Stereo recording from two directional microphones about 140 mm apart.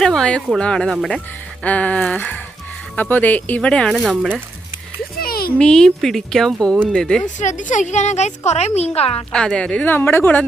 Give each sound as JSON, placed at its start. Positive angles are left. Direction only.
{"t": 0.0, "sound": "a woman's voice", "side_deg": 5}
{"t": 5.2, "sound": "a sound", "side_deg": 90}
{"t": 5.5, "sound": "speech", "side_deg": 5}
{"t": 7.3, "sound": "a woman's voice", "side_deg": 60}
{"t": 9.3, "sound": "speech", "side_deg": 5}